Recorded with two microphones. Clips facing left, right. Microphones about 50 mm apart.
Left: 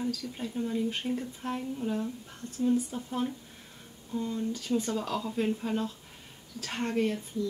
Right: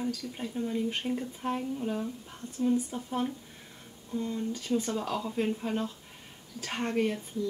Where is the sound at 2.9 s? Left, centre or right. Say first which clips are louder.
Right 1 dB; centre.